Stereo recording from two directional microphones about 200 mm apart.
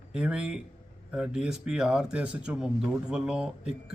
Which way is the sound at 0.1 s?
5° right (ahead or behind).